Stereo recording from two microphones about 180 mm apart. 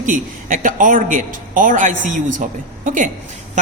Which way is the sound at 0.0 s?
45° right (ahead or behind).